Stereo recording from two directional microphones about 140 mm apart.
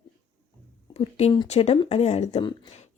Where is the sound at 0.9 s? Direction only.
50° left (ahead or behind).